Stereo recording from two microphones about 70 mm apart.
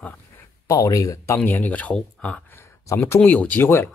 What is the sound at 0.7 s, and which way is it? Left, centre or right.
Speech, left.